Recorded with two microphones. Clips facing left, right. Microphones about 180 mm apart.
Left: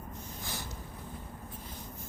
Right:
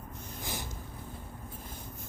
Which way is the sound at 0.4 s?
15° right (ahead or behind).